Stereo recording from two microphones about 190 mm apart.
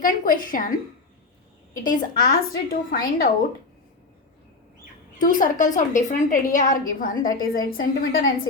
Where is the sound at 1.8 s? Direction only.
45° left (ahead or behind).